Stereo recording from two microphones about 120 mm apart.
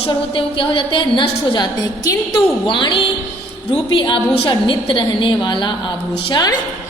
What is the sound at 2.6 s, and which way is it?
A woman's voice, 40° left (ahead or behind).